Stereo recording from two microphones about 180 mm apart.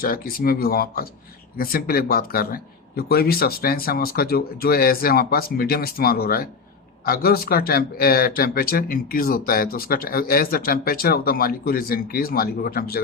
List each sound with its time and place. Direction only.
0.0 s speech: 55° left (ahead or behind)